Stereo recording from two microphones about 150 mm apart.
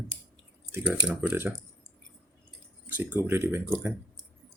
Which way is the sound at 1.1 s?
15° right (ahead or behind).